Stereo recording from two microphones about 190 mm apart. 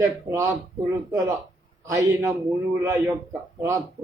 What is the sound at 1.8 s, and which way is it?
A man's voice, 15° right (ahead or behind).